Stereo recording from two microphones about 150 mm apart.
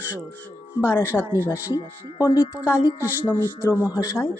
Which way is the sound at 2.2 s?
20° left (ahead or behind).